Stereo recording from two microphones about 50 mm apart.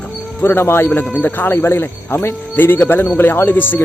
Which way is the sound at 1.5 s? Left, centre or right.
Left.